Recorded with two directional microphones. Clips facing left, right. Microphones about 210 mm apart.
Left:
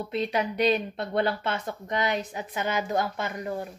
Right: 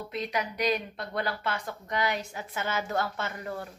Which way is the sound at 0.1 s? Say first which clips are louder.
Left 5 dB; 30° left (ahead or behind).